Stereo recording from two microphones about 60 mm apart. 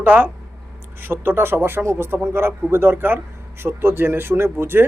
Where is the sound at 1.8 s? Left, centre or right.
Right.